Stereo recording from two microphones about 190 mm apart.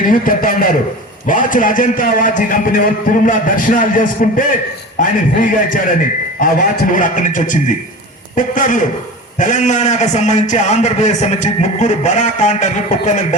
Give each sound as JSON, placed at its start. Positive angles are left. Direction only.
{"t": 0.0, "sound": "a man's voice", "side_deg": 45}